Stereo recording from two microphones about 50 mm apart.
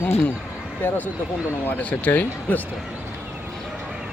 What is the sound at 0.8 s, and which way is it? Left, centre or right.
Speech, left.